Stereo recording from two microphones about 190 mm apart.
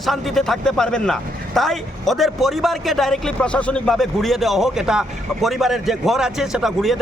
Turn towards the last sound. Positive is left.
turn(degrees=0)  # may be behind; listen again after turning